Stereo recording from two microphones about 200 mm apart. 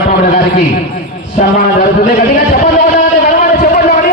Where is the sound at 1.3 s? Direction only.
40° left (ahead or behind).